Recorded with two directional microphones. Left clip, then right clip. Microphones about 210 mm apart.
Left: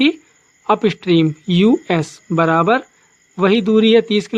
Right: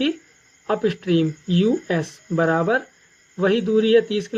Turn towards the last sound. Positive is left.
turn(degrees=45)  # may be behind; listen again after turning